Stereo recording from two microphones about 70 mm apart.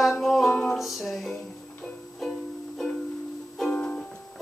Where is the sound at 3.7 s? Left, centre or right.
Centre.